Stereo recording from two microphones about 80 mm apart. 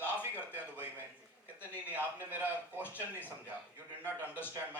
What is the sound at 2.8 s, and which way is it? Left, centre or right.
Speech, left.